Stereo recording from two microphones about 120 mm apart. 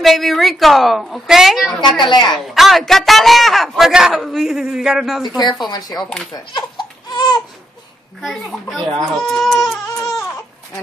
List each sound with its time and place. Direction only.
0.0 s speech: centre (ahead or behind)
1.8 s a woman's voice: 40° left (ahead or behind)
2.3 s speech: centre (ahead or behind)
5.7 s a woman's voice: 35° left (ahead or behind)
6.3 s a sound: 40° left (ahead or behind)
8.2 s speech: 5° left (ahead or behind)
10.0 s baby cry: 30° left (ahead or behind)